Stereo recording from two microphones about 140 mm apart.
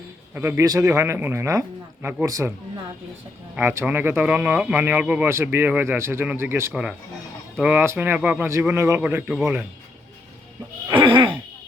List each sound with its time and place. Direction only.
0.3 s speech: 20° right (ahead or behind)
2.2 s speech: 25° right (ahead or behind)
3.5 s a man's voice: 15° right (ahead or behind)
10.8 s a sound: 35° right (ahead or behind)